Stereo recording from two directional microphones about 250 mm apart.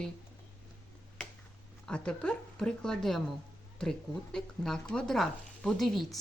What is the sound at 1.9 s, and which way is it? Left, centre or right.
Speech, centre.